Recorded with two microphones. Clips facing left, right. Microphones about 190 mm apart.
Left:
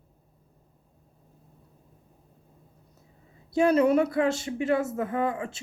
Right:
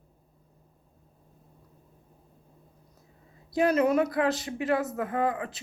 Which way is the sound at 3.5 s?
30° left (ahead or behind).